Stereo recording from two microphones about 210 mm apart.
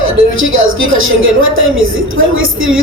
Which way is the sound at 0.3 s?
70° right (ahead or behind).